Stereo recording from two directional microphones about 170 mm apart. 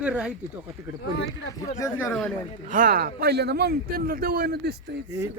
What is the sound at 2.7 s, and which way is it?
A man's voice, 55° right (ahead or behind).